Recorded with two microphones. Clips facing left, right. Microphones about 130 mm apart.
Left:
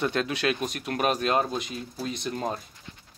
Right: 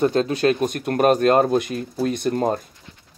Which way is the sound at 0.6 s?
50° right (ahead or behind).